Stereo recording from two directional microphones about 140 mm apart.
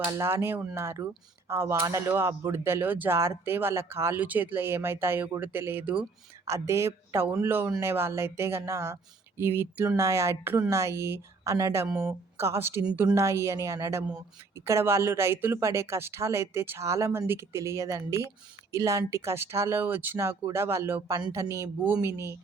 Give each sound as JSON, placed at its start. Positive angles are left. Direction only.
{"t": 0.0, "sound": "speech", "side_deg": -20}
{"t": 13.1, "sound": "speech", "side_deg": -20}